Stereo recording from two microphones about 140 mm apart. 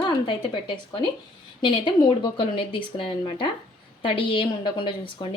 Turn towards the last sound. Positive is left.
turn(degrees=35)  # may be behind; listen again after turning